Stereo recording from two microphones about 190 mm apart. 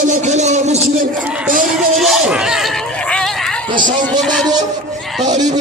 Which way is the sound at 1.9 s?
Centre (ahead or behind).